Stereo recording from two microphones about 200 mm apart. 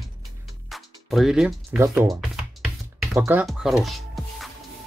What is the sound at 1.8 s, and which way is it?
Speech, 15° right (ahead or behind).